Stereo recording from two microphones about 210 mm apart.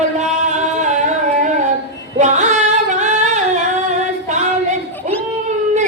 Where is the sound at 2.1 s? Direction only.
35° right (ahead or behind).